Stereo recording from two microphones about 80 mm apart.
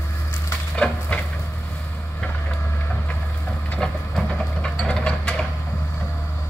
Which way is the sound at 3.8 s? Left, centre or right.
Centre.